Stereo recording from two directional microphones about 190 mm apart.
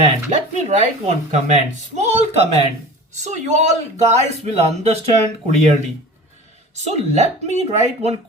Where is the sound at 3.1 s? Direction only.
40° right (ahead or behind).